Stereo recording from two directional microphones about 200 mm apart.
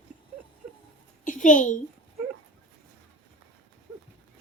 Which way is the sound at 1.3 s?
40° left (ahead or behind).